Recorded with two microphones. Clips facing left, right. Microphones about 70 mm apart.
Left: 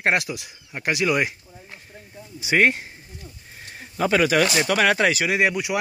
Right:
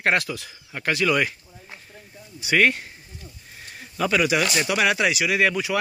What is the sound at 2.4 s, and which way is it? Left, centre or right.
Speech, left.